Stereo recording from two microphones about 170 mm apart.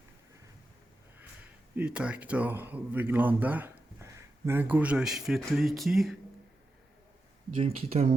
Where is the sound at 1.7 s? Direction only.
5° right (ahead or behind).